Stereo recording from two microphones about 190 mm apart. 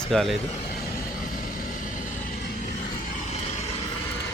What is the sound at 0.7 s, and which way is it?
Vehicle, 50° left (ahead or behind).